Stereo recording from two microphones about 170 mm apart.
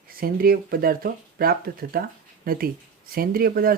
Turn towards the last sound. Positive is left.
turn(degrees=-60)  # may be behind; listen again after turning